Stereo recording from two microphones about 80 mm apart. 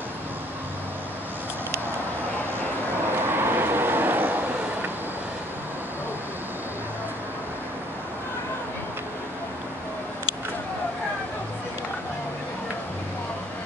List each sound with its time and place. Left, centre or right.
3.3 s vehicle: right